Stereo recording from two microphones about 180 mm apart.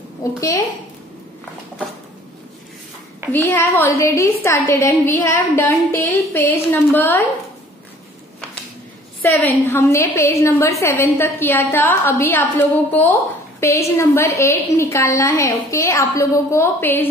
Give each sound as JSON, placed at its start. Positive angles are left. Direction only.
{"t": 3.3, "sound": "a woman's voice", "side_deg": 10}
{"t": 9.2, "sound": "a woman's voice", "side_deg": 10}